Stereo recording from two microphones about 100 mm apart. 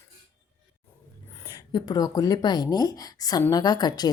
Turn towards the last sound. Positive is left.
turn(degrees=40)  # may be behind; listen again after turning